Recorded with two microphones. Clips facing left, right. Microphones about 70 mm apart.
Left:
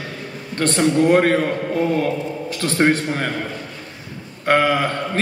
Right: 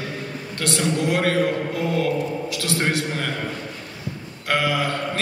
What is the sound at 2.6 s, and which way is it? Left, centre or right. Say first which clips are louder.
Speech: left 7 dB; left.